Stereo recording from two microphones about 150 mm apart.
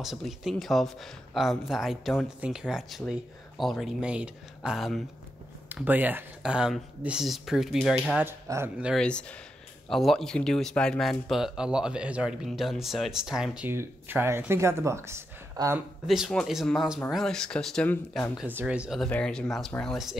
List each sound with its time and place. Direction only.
0.0 s speech: centre (ahead or behind)
5.9 s speech: 10° right (ahead or behind)
8.2 s speech: 15° right (ahead or behind)
8.8 s speech: 5° left (ahead or behind)
13.7 s speech: 15° right (ahead or behind)
16.1 s speech: centre (ahead or behind)
18.4 s speech: 10° right (ahead or behind)
19.0 s speech: 5° left (ahead or behind)